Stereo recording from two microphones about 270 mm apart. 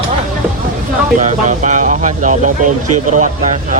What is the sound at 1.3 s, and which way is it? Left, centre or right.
Speech, right.